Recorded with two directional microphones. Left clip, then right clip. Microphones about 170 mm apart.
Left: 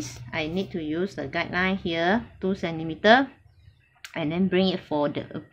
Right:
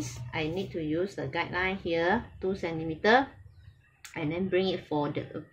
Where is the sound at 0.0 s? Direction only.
40° left (ahead or behind).